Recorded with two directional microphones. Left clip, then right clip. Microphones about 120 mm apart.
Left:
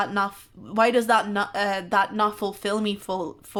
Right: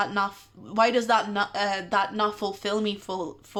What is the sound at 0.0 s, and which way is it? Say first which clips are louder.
Speech: left 1 dB; 35° left (ahead or behind).